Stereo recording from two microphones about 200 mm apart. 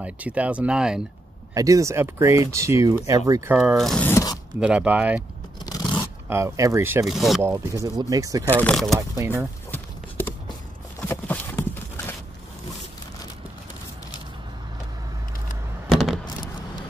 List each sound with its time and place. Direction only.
0.0 s speech: 5° right (ahead or behind)
1.5 s speech: 15° right (ahead or behind)
3.5 s speech: centre (ahead or behind); by 4.4 s 15° left (ahead or behind)
4.6 s speech: 5° right (ahead or behind)
5.7 s scrape: 20° left (ahead or behind)
6.2 s speech: 15° right (ahead or behind)
7.4 s speech: 15° right (ahead or behind)
8.6 s speech: centre (ahead or behind)
9.1 s speech: 10° right (ahead or behind)
11.0 s a sound: 10° left (ahead or behind)
15.9 s a sound: centre (ahead or behind)